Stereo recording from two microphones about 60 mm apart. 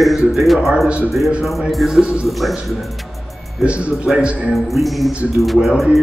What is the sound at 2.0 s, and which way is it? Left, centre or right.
Speech, centre.